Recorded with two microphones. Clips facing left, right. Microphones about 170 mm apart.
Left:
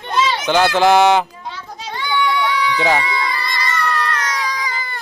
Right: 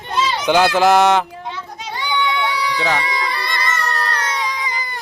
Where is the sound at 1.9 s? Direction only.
15° right (ahead or behind).